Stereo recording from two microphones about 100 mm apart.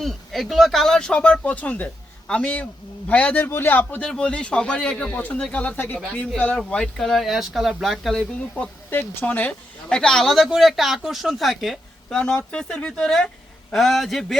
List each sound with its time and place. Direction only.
0.0 s speech: centre (ahead or behind)
12.2 s speech: 10° left (ahead or behind)